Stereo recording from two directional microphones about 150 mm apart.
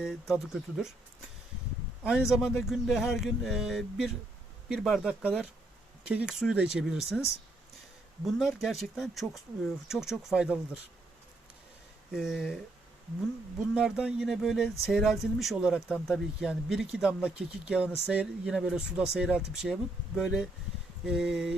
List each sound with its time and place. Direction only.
0.0 s speech: centre (ahead or behind)
2.0 s speech: 5° right (ahead or behind)
8.2 s speech: centre (ahead or behind)
12.1 s speech: centre (ahead or behind)
13.7 s speech: 5° right (ahead or behind)